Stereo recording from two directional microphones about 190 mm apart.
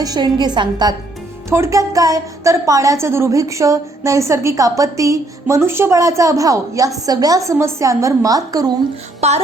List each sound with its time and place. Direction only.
0.0 s a woman's voice: 20° right (ahead or behind)
9.2 s music: 35° right (ahead or behind)